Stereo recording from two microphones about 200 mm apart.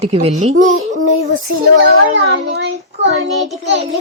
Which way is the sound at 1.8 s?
65° right (ahead or behind).